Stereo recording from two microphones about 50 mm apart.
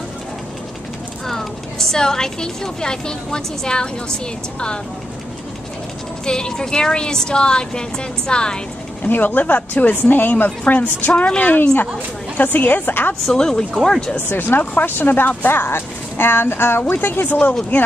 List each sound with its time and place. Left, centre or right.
1.2 s a woman's voice: centre
6.2 s speech: centre
9.0 s a woman's voice: left
12.4 s speech: left
13.3 s speech: centre
14.3 s speech: left